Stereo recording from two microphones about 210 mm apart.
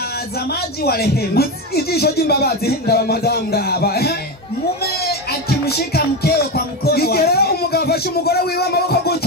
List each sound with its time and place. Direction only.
0.8 s music: 50° left (ahead or behind)
5.5 s music: 50° left (ahead or behind)